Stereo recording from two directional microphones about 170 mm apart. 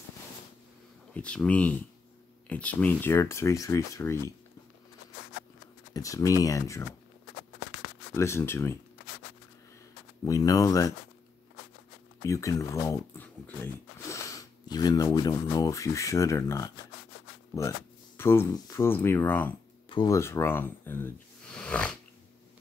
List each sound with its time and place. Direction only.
1.1 s speech: 5° left (ahead or behind)
5.9 s speech: 20° left (ahead or behind)
8.1 s speech: 15° left (ahead or behind)
10.2 s speech: 20° left (ahead or behind)
12.2 s speech: 20° left (ahead or behind)
19.9 s speech: 25° left (ahead or behind)
20.2 s speech: 15° left (ahead or behind)